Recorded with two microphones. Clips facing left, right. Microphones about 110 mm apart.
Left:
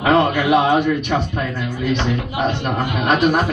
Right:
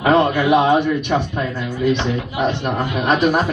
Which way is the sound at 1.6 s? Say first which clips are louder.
Right 3 dB; 55° left (ahead or behind).